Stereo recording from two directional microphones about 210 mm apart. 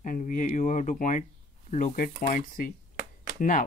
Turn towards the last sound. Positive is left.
turn(degrees=40)  # may be behind; listen again after turning